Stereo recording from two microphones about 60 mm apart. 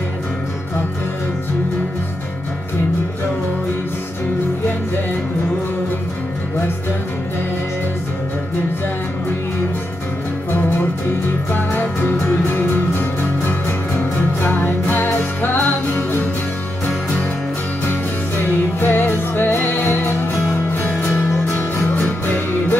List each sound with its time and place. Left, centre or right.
11.5 s music: left
18.4 s music: left